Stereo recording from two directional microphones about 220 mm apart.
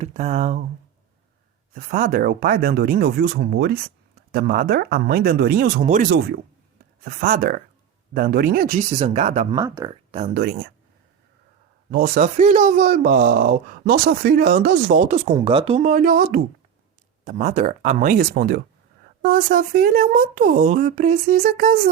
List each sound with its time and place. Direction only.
0.0 s speech: 30° right (ahead or behind)
1.7 s speech: 35° right (ahead or behind)
6.1 s speech: 50° right (ahead or behind); by 9.5 s 30° right (ahead or behind)
9.5 s speech: 15° right (ahead or behind)
9.9 s speech: 25° right (ahead or behind)
11.9 s speech: 45° right (ahead or behind); by 15.9 s 25° right (ahead or behind)
15.9 s speech: 40° right (ahead or behind)